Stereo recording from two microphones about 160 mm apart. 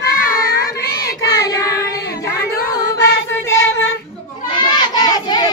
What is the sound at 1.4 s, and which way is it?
Child singing, 20° left (ahead or behind).